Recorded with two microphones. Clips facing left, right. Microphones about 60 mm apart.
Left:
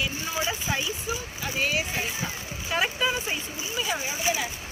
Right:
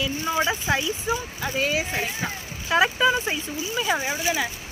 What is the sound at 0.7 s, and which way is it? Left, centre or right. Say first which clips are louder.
Speech: right 5 dB; right.